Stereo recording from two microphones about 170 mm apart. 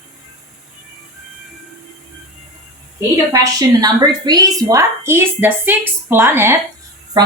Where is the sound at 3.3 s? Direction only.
20° right (ahead or behind).